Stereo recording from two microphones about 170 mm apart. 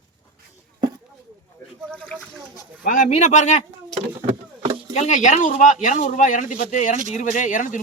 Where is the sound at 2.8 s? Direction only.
55° left (ahead or behind).